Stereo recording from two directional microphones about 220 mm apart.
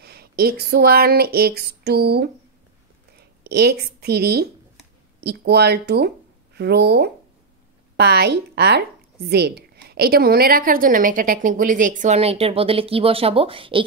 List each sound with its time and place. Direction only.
0.0 s a woman's voice: 45° right (ahead or behind); by 13.8 s 25° right (ahead or behind)